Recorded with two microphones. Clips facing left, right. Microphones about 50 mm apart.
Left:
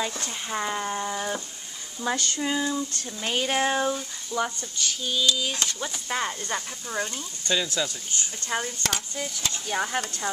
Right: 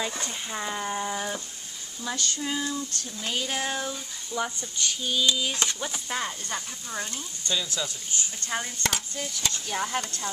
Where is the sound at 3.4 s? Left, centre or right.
Left.